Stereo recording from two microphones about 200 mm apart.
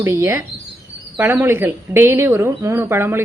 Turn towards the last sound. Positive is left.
turn(degrees=-10)  # may be behind; listen again after turning